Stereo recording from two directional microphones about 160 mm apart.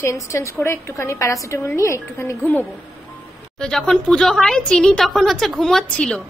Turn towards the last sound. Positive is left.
turn(degrees=5)  # may be behind; listen again after turning